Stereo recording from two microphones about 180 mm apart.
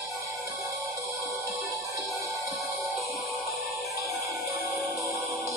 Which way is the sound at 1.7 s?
Centre (ahead or behind).